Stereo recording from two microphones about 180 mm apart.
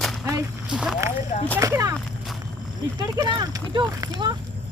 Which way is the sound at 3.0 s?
25° right (ahead or behind).